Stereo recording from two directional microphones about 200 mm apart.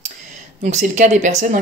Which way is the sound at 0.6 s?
35° right (ahead or behind).